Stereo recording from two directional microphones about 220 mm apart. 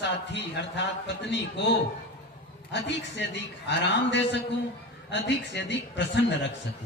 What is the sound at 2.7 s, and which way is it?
A man's voice, 50° left (ahead or behind).